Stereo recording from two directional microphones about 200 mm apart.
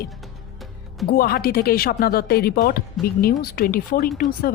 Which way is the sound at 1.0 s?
50° left (ahead or behind).